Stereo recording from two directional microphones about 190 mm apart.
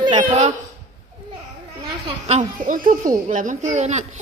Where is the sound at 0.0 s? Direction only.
25° right (ahead or behind).